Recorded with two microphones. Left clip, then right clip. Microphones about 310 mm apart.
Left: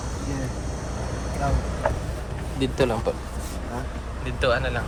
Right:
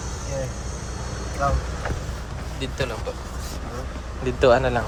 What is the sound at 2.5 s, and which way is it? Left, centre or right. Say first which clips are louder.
Speech: left 5 dB; centre.